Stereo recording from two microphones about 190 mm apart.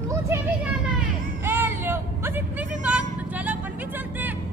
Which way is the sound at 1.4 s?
10° right (ahead or behind).